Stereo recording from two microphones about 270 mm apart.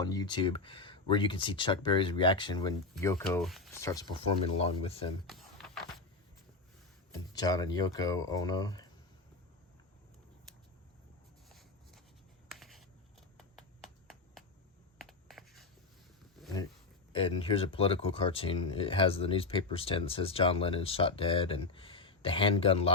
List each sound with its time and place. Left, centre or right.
0.0 s speech: centre
3.8 s speech: centre
5.2 s a sound: centre
7.3 s speech: centre
11.4 s a sound: centre
12.5 s writing: centre
13.3 s a sound: centre
14.9 s scratch: centre
17.1 s speech: centre